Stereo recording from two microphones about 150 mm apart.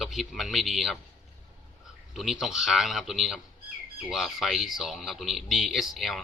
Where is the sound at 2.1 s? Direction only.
Centre (ahead or behind).